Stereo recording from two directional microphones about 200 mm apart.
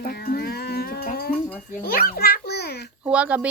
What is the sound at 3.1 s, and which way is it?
Speech, 5° right (ahead or behind).